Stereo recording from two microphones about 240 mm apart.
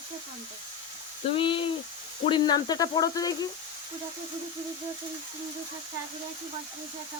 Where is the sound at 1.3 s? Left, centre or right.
Left.